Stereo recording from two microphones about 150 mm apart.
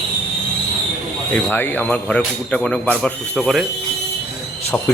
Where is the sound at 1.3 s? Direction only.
10° left (ahead or behind).